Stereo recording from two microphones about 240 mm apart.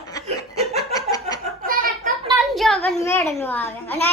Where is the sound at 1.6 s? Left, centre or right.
Right.